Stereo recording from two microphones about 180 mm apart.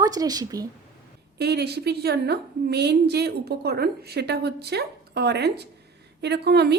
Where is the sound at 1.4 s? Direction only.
65° right (ahead or behind).